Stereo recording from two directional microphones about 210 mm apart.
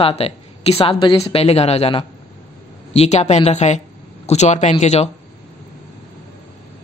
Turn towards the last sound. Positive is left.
turn(degrees=30)  # may be behind; listen again after turning